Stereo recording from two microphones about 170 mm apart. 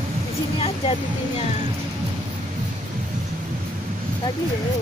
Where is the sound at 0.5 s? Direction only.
35° left (ahead or behind).